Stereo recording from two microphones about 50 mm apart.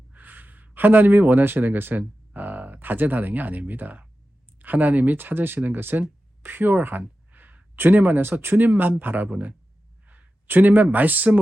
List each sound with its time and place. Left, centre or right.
0.1 s speech: right
9.3 s speech: right
10.1 s a sound: right
10.9 s speech: right